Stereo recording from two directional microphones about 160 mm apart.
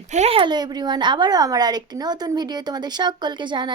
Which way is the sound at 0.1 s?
40° right (ahead or behind).